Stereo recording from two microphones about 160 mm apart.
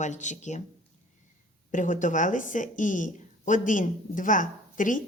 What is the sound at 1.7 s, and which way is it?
Speech, 55° left (ahead or behind).